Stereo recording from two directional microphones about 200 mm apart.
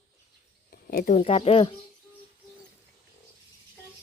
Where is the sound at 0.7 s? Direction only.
50° left (ahead or behind).